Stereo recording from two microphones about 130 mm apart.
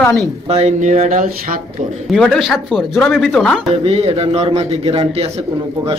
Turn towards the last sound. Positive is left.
turn(degrees=-50)  # may be behind; listen again after turning